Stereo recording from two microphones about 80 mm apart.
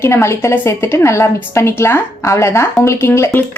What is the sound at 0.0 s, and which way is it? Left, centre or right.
A woman's voice, left.